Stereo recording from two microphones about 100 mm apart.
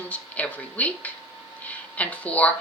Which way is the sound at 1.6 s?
15° left (ahead or behind).